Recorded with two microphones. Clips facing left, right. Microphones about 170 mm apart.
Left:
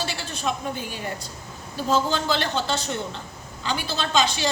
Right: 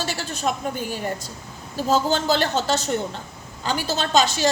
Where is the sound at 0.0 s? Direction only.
40° right (ahead or behind).